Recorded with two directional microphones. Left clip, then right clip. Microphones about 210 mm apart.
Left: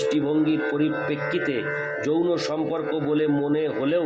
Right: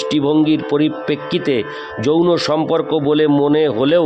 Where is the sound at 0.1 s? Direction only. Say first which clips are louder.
Right 8 dB; 55° right (ahead or behind).